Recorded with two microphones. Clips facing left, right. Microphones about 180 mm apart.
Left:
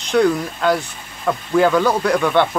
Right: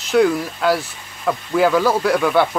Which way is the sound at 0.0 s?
5° right (ahead or behind).